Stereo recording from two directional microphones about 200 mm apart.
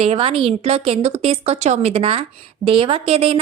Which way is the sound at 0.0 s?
30° right (ahead or behind).